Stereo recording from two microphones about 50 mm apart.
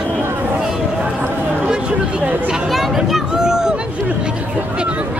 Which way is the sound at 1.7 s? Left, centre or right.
Right.